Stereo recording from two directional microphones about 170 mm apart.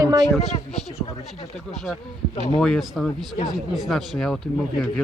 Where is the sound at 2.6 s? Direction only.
Centre (ahead or behind).